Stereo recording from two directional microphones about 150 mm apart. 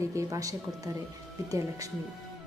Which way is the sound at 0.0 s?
20° right (ahead or behind).